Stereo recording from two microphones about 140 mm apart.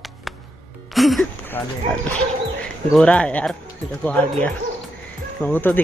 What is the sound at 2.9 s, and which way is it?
Speech, 5° left (ahead or behind).